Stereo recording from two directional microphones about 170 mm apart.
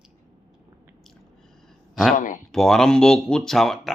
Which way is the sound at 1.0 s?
Centre (ahead or behind).